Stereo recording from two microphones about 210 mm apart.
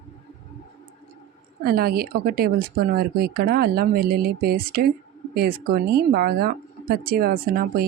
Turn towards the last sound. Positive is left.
turn(degrees=-45)  # may be behind; listen again after turning